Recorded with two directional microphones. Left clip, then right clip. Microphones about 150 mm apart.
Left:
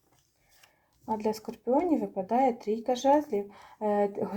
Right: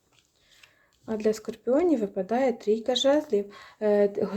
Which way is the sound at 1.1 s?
40° right (ahead or behind).